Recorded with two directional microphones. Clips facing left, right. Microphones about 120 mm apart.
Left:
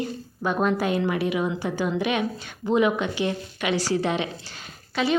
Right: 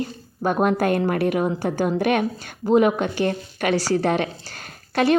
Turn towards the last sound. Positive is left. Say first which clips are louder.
# right 5 dB
turn(degrees=-50)  # may be behind; listen again after turning